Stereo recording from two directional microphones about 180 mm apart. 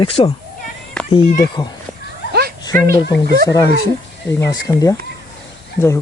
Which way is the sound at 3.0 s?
70° left (ahead or behind).